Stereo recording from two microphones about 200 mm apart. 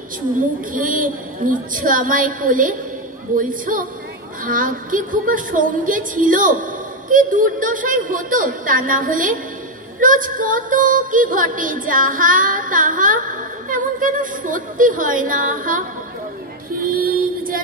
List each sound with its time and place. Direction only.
0.7 s music: 40° right (ahead or behind)
16.9 s female singing: 45° right (ahead or behind)